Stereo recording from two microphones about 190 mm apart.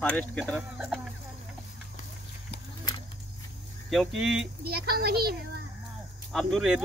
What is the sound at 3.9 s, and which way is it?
Speech, centre (ahead or behind).